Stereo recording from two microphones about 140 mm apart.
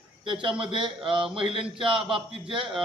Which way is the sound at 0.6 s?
35° right (ahead or behind).